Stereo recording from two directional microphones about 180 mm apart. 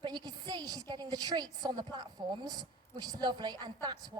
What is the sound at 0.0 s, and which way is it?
A woman's voice, 25° right (ahead or behind).